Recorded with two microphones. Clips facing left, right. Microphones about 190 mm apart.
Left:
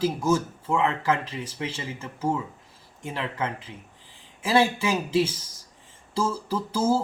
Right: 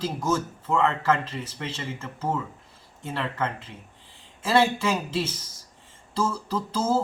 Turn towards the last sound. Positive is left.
turn(degrees=15)  # may be behind; listen again after turning